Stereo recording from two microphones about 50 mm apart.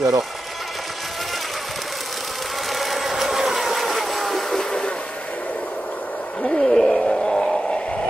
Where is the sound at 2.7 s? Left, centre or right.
Centre.